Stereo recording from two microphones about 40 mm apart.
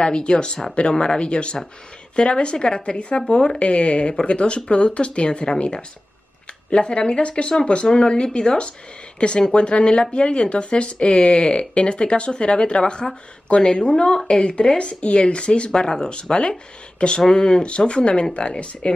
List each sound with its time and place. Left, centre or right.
0.0 s speech: left